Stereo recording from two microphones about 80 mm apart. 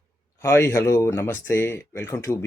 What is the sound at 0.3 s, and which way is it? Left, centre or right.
Speech, left.